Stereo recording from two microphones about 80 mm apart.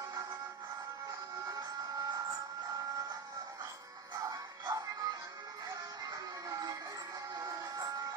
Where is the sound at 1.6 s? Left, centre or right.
Right.